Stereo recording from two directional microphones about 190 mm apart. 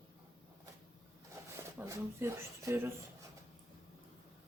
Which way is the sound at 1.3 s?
15° right (ahead or behind).